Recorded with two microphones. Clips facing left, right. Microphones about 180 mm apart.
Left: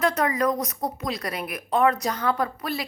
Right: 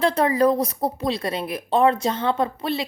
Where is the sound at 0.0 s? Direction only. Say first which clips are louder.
Right 4 dB; 30° right (ahead or behind).